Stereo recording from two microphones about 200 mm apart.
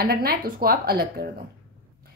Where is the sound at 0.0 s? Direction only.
50° right (ahead or behind).